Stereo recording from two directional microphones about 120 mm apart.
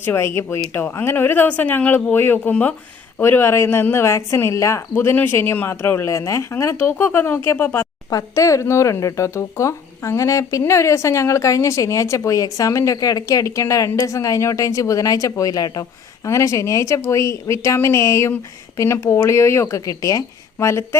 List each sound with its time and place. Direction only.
0.0 s speech: 20° left (ahead or behind)